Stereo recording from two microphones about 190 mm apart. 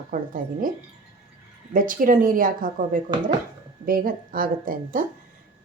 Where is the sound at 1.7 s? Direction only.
45° right (ahead or behind).